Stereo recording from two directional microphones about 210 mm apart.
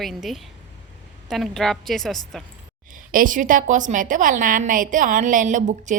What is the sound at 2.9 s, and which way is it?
A woman's voice, 40° right (ahead or behind).